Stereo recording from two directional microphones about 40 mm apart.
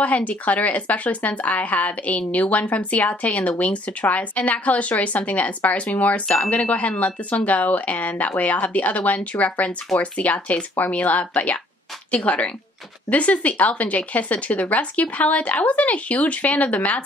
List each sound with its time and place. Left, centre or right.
0.0 s speech: left